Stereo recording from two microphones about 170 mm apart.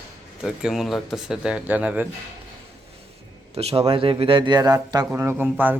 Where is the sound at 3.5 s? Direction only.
35° right (ahead or behind).